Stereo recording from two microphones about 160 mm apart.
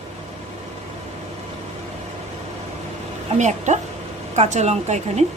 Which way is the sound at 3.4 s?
50° right (ahead or behind).